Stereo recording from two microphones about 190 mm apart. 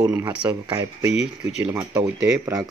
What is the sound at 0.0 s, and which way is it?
Speech, 15° right (ahead or behind).